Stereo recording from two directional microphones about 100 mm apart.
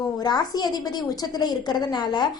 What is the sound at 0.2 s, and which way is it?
A woman's voice, 45° left (ahead or behind).